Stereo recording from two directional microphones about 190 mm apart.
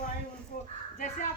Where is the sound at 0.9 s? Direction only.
40° left (ahead or behind).